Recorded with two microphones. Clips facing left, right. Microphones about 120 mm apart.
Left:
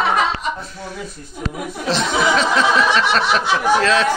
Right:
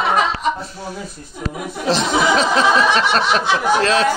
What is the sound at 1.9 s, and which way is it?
Speech, 35° right (ahead or behind).